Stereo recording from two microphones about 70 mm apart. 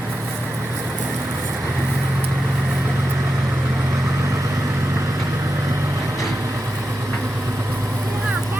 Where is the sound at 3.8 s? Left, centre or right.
Right.